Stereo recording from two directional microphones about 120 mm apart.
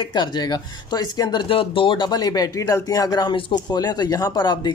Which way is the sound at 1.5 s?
50° left (ahead or behind).